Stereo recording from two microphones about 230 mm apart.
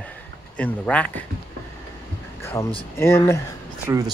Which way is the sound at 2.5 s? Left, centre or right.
Centre.